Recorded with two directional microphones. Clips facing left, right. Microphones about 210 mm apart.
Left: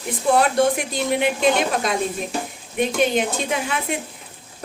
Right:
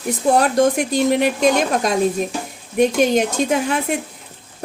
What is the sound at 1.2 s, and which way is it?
A woman's voice, 40° right (ahead or behind).